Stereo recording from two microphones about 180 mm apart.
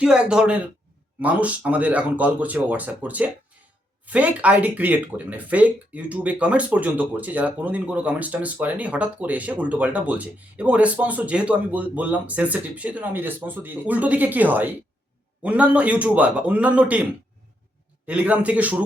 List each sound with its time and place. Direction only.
0.0 s speech: 5° right (ahead or behind)
18.0 s speech: 10° right (ahead or behind)